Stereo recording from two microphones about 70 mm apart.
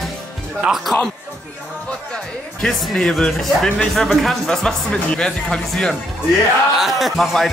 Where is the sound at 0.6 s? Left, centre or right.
Centre.